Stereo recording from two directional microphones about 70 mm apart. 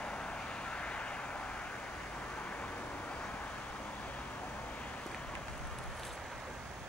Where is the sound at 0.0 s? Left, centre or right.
Centre.